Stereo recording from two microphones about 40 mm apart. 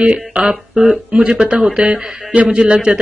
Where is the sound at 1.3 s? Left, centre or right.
Centre.